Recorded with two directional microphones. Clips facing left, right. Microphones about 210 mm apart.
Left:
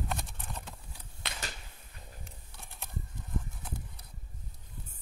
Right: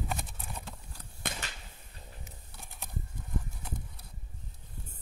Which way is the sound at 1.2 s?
50° right (ahead or behind).